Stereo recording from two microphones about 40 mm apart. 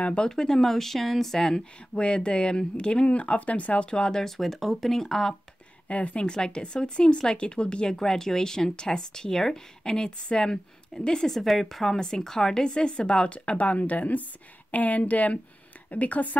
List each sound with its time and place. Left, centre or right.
0.0 s speech: left
0.3 s speech: centre
2.0 s speech: left
5.9 s a woman's voice: left
6.2 s speech: left
8.0 s speech: centre
11.3 s speech: centre
12.6 s a woman's voice: left